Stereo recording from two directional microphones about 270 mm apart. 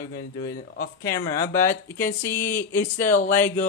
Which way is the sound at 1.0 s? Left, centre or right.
Centre.